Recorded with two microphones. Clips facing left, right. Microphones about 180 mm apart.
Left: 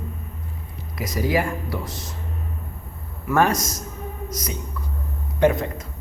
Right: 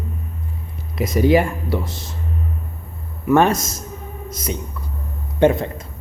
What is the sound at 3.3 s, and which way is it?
A woman's voice, 25° right (ahead or behind).